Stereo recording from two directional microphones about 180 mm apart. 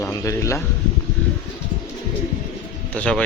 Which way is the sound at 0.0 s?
15° left (ahead or behind).